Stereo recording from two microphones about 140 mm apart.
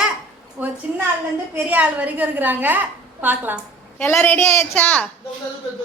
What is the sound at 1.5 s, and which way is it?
A woman's voice, 10° right (ahead or behind).